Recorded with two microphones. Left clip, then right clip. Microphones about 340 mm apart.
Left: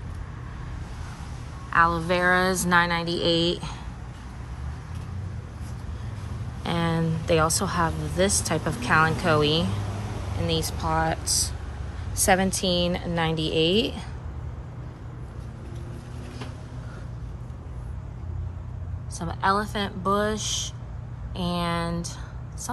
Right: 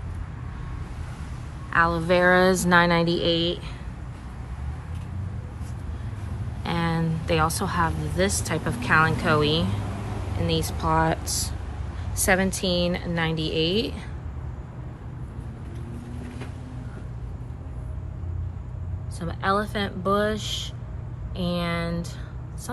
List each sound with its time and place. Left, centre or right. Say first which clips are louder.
1.7 s speech: even; centre
6.6 s a woman's voice: even; centre
19.1 s a woman's voice: left 1 dB; centre